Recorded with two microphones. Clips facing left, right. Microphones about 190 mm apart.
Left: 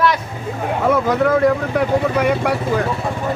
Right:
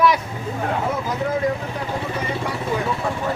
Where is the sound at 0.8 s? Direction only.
80° left.